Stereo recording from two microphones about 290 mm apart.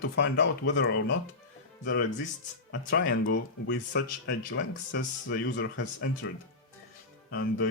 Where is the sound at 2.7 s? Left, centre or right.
Left.